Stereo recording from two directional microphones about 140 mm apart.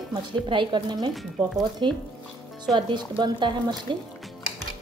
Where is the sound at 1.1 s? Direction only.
Centre (ahead or behind).